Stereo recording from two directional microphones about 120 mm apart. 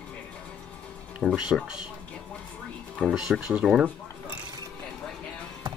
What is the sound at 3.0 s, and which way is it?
Speech, 5° right (ahead or behind).